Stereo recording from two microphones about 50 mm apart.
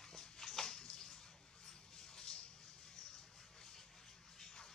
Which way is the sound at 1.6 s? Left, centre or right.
Centre.